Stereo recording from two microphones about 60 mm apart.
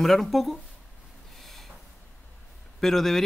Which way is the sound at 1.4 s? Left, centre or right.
Centre.